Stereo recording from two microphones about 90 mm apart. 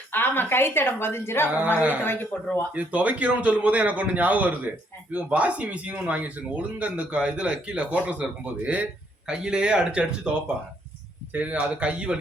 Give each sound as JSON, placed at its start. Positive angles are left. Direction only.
{"t": 0.1, "sound": "a woman's voice", "side_deg": 20}
{"t": 1.5, "sound": "speech", "side_deg": -20}
{"t": 2.0, "sound": "a woman's voice", "side_deg": 20}
{"t": 2.7, "sound": "speech", "side_deg": -15}